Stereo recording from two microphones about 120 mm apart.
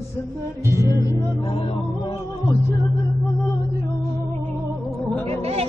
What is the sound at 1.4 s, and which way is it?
Music, 50° left (ahead or behind).